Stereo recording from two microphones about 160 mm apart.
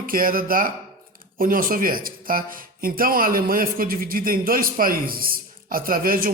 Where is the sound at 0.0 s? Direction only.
60° right (ahead or behind).